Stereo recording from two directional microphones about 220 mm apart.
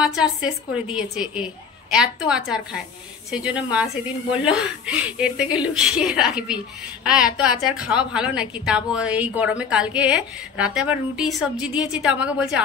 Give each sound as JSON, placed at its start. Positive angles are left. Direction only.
{"t": 0.0, "sound": "a woman's voice", "side_deg": -5}